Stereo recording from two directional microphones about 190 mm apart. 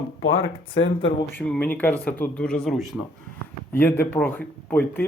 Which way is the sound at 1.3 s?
10° left (ahead or behind).